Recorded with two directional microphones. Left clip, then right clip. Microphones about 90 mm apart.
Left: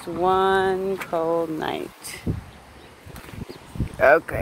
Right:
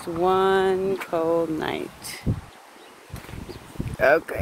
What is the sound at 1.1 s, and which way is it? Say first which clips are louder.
Speech: left 1 dB; 55° right (ahead or behind).